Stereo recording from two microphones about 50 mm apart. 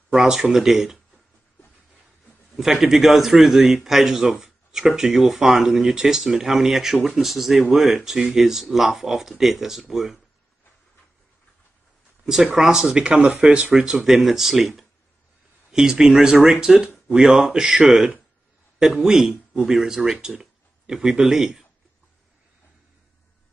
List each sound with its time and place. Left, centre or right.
0.1 s a man's voice: centre
2.5 s a man's voice: centre
12.5 s a man's voice: centre
13.9 s a man's voice: centre